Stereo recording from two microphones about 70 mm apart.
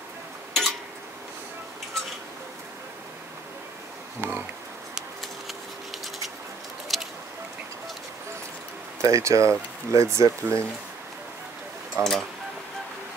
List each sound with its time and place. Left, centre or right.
0.5 s tick-tock: centre
4.2 s speech: right
6.9 s a sound: centre
9.0 s speech: right
12.0 s speech: centre